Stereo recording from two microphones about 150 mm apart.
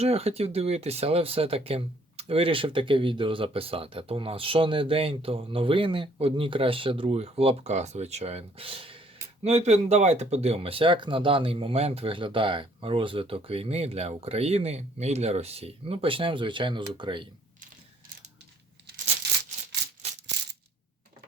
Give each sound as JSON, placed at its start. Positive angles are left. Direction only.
{"t": 0.0, "sound": "speech", "side_deg": -45}